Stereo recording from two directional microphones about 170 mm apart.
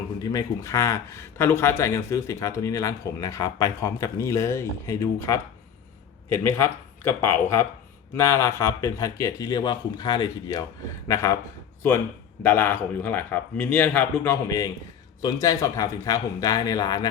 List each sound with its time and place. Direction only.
0.2 s speech: 20° left (ahead or behind)
12.4 s speech: 10° left (ahead or behind)